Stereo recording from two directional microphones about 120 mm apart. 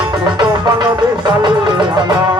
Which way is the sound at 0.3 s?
40° right (ahead or behind).